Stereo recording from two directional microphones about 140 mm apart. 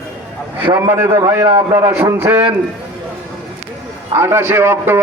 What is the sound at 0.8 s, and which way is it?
A man's voice, 20° right (ahead or behind).